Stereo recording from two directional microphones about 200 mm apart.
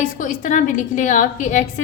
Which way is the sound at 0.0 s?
40° left (ahead or behind).